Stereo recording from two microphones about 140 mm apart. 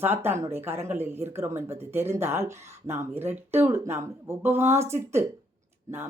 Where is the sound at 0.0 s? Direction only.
15° right (ahead or behind).